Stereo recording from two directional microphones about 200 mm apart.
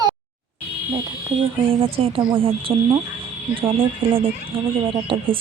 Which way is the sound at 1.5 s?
30° right (ahead or behind).